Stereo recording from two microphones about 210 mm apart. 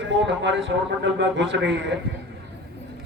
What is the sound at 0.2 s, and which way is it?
A man's voice, 60° right (ahead or behind).